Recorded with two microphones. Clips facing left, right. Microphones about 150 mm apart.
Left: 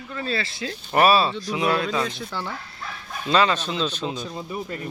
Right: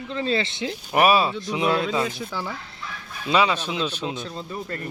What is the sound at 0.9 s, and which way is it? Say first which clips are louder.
Speech: left 1 dB; 15° right (ahead or behind).